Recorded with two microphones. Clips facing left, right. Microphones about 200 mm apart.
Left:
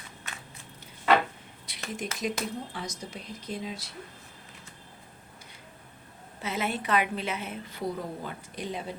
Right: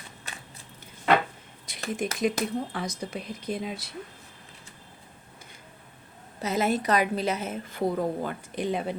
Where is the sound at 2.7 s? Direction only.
60° right (ahead or behind).